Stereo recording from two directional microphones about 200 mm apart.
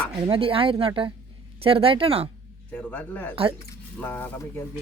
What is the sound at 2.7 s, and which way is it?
Speech, 5° left (ahead or behind).